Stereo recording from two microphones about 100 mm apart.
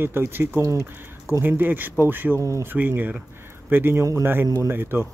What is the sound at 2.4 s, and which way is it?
Speech, 30° right (ahead or behind).